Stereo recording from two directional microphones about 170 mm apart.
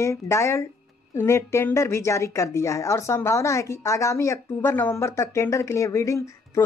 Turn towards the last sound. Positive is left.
turn(degrees=15)  # may be behind; listen again after turning